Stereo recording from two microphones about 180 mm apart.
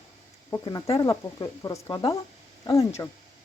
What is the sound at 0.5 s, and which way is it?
Speech, 20° left (ahead or behind).